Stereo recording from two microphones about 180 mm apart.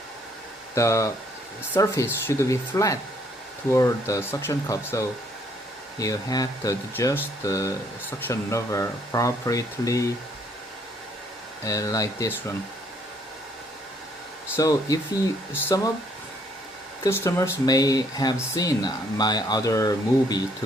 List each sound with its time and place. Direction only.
0.8 s speech: 15° left (ahead or behind)
11.6 s speech: 20° left (ahead or behind)
14.5 s speech: 20° left (ahead or behind)
17.0 s speech: 15° left (ahead or behind)